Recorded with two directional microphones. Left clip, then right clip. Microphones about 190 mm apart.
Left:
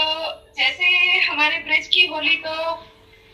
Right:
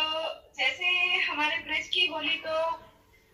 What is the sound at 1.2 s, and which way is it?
A woman's voice, 50° left (ahead or behind).